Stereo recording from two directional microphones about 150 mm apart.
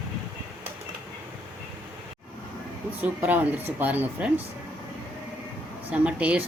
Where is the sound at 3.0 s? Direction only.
10° right (ahead or behind).